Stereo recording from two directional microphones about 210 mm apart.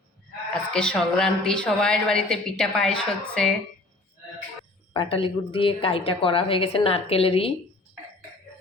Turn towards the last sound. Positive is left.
turn(degrees=25)  # may be behind; listen again after turning